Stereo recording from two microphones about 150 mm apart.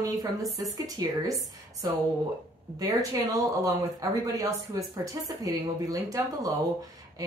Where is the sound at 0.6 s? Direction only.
25° right (ahead or behind).